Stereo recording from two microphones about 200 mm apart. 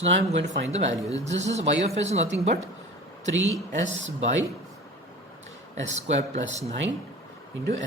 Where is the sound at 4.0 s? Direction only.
70° right (ahead or behind).